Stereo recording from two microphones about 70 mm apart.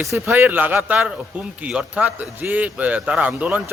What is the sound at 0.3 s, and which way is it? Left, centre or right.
A man's voice, right.